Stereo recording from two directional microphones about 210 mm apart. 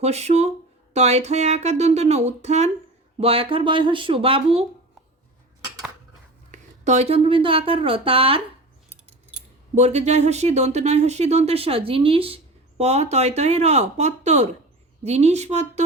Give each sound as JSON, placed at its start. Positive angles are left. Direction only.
{"t": 0.0, "sound": "speech", "side_deg": -30}
{"t": 6.5, "sound": "speech", "side_deg": -35}
{"t": 9.7, "sound": "speech", "side_deg": -30}